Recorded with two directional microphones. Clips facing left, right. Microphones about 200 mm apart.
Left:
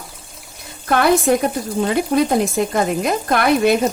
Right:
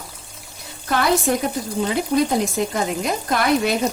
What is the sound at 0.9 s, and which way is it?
A woman's voice, 55° left (ahead or behind).